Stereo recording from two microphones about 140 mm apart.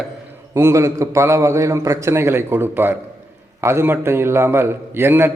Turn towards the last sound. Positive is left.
turn(degrees=-15)  # may be behind; listen again after turning